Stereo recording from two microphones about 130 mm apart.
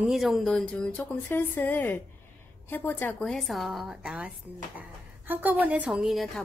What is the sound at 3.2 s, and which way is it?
A woman's voice, centre (ahead or behind).